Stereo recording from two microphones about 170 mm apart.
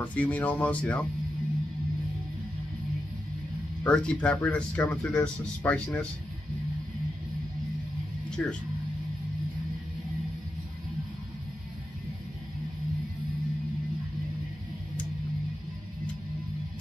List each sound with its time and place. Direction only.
0.0 s speech: 10° left (ahead or behind)
3.8 s speech: 5° left (ahead or behind)
8.4 s speech: 5° left (ahead or behind)